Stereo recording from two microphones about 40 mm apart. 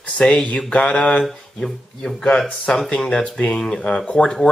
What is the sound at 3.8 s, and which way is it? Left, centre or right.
Speech, left.